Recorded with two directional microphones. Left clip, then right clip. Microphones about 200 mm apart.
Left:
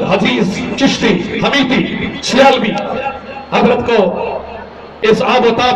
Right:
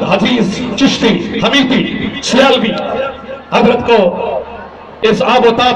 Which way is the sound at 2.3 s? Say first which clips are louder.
Even; 40° left (ahead or behind).